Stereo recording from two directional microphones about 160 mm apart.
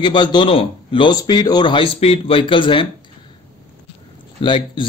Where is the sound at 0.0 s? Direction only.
30° left (ahead or behind).